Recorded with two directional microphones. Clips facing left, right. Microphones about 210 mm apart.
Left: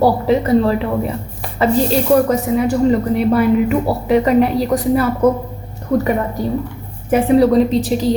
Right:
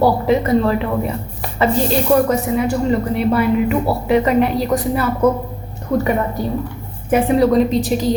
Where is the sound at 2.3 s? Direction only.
40° left (ahead or behind).